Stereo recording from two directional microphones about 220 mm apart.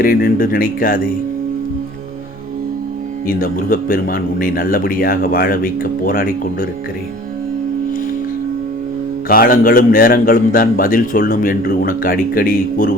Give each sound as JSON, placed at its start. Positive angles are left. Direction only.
{"t": 0.0, "sound": "a man's voice", "side_deg": 40}
{"t": 3.2, "sound": "a man's voice", "side_deg": 40}
{"t": 9.3, "sound": "a man's voice", "side_deg": 40}